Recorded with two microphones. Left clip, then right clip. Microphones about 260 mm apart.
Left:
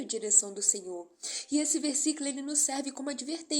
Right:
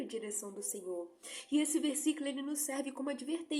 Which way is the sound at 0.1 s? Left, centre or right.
Centre.